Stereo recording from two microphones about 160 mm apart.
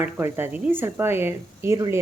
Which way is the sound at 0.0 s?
15° right (ahead or behind).